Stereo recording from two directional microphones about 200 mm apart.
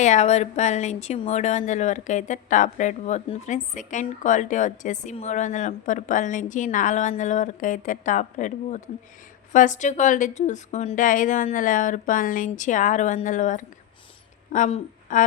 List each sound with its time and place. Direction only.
0.0 s a woman's voice: 35° left (ahead or behind)